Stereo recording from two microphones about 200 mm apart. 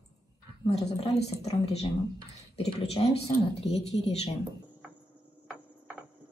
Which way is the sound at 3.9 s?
30° left (ahead or behind).